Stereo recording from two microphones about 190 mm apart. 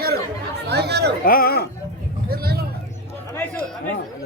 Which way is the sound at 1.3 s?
50° left (ahead or behind).